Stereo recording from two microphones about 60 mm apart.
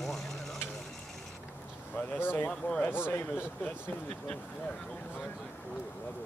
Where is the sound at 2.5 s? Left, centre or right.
Centre.